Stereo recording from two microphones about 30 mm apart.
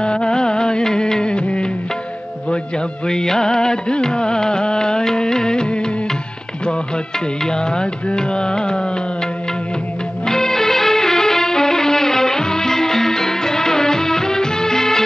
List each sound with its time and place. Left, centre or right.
0.0 s music: left
3.1 s music: left
7.7 s music: left
10.2 s music: centre